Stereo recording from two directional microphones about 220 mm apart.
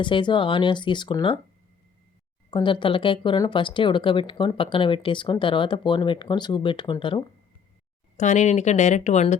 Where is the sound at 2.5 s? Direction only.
20° left (ahead or behind).